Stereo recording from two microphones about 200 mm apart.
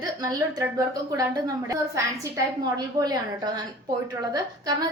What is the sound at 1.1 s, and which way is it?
A woman's voice, 20° right (ahead or behind).